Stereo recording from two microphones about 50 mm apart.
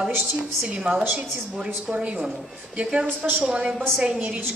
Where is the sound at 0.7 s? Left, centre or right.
Right.